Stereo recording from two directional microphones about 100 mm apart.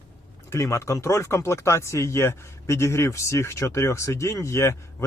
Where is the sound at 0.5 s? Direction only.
30° left (ahead or behind).